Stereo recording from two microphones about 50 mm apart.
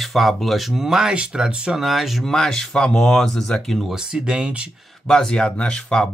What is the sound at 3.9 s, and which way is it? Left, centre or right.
Speech, centre.